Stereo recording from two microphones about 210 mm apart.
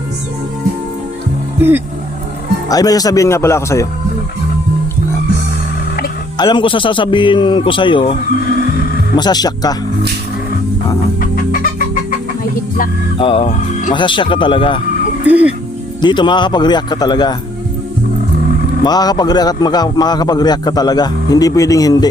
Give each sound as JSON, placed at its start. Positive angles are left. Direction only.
{"t": 2.6, "sound": "speech", "side_deg": 15}
{"t": 6.3, "sound": "speech", "side_deg": 20}
{"t": 9.1, "sound": "speech", "side_deg": 20}
{"t": 11.2, "sound": "chicken", "side_deg": 45}
{"t": 13.1, "sound": "speech", "side_deg": 25}
{"t": 15.2, "sound": "speech", "side_deg": -5}
{"t": 16.0, "sound": "speech", "side_deg": 20}
{"t": 18.9, "sound": "speech", "side_deg": 20}